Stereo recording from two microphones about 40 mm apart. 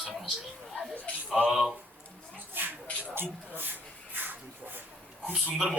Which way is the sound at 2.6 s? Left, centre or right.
Right.